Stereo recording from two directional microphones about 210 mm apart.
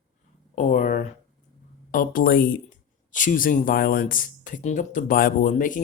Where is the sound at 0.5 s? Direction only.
35° left (ahead or behind).